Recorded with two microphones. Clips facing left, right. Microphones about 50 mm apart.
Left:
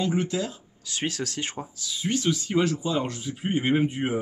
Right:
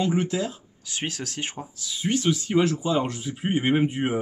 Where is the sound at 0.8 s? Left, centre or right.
Right.